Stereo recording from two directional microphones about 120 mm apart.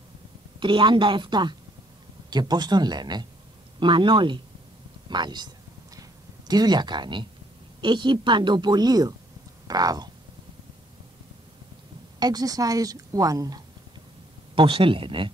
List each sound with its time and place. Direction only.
0.6 s a woman's voice: 45° right (ahead or behind)
5.9 s a sound: 35° right (ahead or behind)
7.8 s a woman's voice: 40° right (ahead or behind)
12.2 s a woman's voice: 35° right (ahead or behind)
14.5 s speech: 45° right (ahead or behind)